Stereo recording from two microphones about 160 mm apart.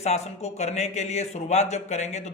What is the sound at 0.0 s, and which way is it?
Speech, 45° left (ahead or behind).